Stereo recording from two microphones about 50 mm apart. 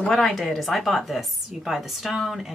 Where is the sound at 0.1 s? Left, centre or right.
Centre.